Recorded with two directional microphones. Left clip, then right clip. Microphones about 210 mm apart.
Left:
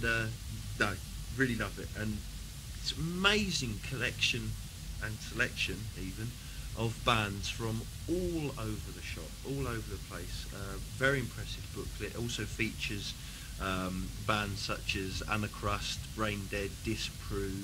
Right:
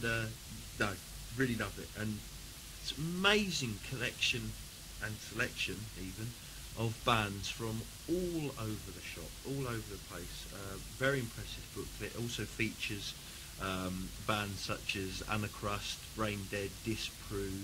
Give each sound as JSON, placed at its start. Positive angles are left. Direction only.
{"t": 0.0, "sound": "speech", "side_deg": -45}
{"t": 6.8, "sound": "speech", "side_deg": -40}